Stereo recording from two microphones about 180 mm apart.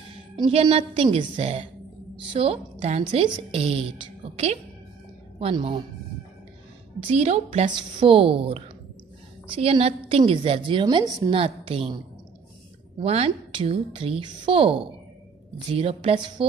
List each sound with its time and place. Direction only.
0.4 s a woman's voice: 30° right (ahead or behind)
7.0 s a woman's voice: 35° right (ahead or behind)
13.0 s a woman's voice: 35° right (ahead or behind)